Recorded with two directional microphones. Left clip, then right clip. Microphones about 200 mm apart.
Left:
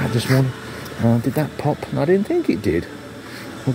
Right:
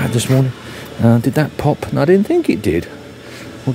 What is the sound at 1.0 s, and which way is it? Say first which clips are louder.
Speech: right 5 dB; 25° right (ahead or behind).